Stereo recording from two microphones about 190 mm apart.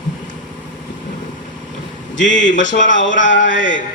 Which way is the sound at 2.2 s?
40° left (ahead or behind).